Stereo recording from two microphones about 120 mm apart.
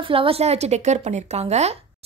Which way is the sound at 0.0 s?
50° right (ahead or behind).